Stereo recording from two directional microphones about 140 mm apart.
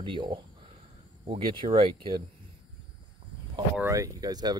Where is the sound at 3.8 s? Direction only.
20° right (ahead or behind).